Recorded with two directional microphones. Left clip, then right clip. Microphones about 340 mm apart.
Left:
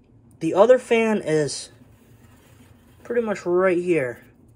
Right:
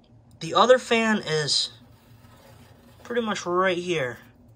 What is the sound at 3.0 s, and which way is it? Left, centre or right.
Speech, right.